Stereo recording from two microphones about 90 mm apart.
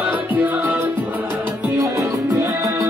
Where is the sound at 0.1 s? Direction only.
15° right (ahead or behind).